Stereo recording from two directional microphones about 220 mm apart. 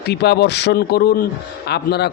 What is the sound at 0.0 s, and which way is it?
Speech, 50° left (ahead or behind).